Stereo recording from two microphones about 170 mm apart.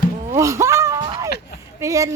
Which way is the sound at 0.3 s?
15° right (ahead or behind).